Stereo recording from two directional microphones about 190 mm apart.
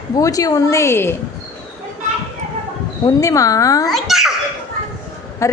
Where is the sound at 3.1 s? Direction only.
15° left (ahead or behind).